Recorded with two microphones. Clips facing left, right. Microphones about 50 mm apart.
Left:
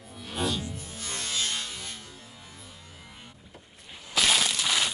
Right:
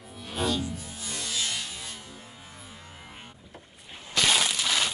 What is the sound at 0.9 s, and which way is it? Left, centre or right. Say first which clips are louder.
Music: left 2 dB; left.